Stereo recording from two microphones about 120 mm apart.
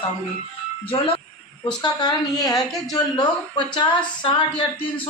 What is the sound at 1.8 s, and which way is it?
A woman's voice, 35° left (ahead or behind).